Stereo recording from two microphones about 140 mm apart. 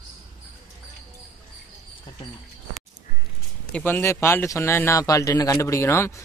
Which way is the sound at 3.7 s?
10° left (ahead or behind).